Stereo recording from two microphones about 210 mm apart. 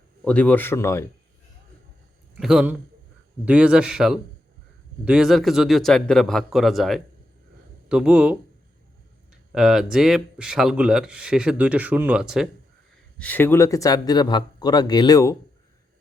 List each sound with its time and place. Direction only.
0.3 s speech: 5° left (ahead or behind)
2.4 s speech: 5° right (ahead or behind)
9.5 s speech: centre (ahead or behind)
13.1 s speech: 10° left (ahead or behind)